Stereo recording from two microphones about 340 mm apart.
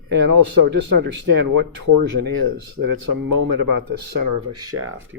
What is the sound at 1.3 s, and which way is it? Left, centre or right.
Speech, right.